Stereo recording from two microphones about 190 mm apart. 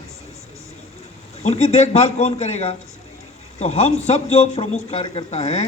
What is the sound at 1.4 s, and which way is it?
A man's voice, 35° left (ahead or behind).